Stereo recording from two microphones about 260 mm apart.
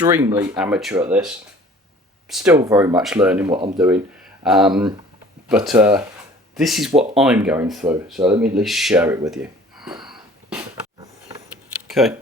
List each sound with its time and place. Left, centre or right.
0.0 s speech: centre
2.3 s speech: centre
3.4 s speech: centre
3.8 s speech: centre
10.0 s wheeze: centre
11.9 s a sound: centre